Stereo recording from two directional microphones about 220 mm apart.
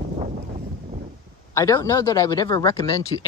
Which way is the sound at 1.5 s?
15° left (ahead or behind).